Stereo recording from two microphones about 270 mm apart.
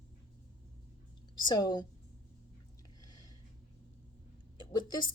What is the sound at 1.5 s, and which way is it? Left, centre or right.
Speech, centre.